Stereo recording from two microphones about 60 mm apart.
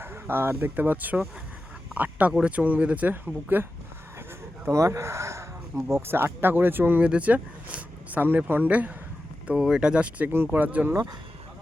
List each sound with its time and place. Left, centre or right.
0.0 s speech: right
4.7 s speech: right
7.0 s speech: right
9.6 s speech: centre
10.2 s speech: right
10.5 s speech: right